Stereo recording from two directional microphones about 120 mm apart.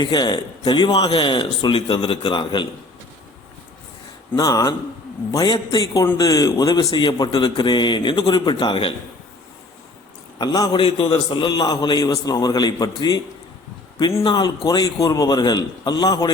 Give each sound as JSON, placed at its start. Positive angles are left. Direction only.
{"t": 0.0, "sound": "speech", "side_deg": 35}
{"t": 4.4, "sound": "a man's voice", "side_deg": 35}
{"t": 10.3, "sound": "speech", "side_deg": 35}
{"t": 14.3, "sound": "speech", "side_deg": 35}